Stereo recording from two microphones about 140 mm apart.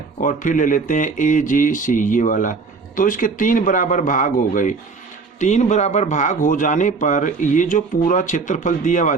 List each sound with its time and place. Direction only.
0.2 s speech: 70° left (ahead or behind)
5.4 s a man's voice: 55° left (ahead or behind)